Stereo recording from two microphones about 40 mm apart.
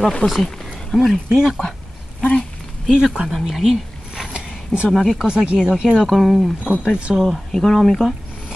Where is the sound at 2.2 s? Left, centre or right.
Left.